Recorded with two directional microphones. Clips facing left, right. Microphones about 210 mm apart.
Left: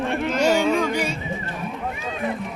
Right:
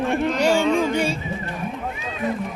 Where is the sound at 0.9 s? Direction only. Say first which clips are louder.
Right 3 dB; 30° right (ahead or behind).